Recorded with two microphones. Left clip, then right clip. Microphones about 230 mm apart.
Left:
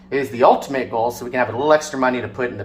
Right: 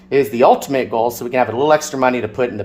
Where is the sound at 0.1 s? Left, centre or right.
Right.